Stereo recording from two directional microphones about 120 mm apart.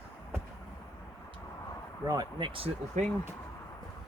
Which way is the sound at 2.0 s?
30° right (ahead or behind).